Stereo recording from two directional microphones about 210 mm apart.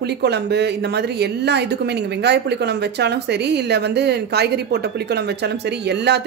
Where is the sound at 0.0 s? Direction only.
55° right (ahead or behind).